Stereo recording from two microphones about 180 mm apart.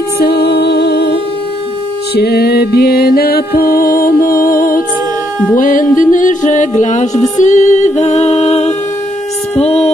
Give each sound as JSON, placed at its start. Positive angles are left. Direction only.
{"t": 0.2, "sound": "music", "side_deg": 65}
{"t": 9.6, "sound": "speech", "side_deg": 35}